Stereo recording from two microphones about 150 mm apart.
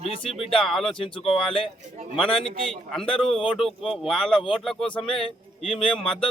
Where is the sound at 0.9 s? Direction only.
35° left (ahead or behind).